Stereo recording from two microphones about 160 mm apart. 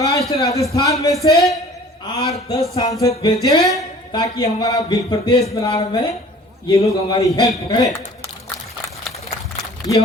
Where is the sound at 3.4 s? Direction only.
20° left (ahead or behind).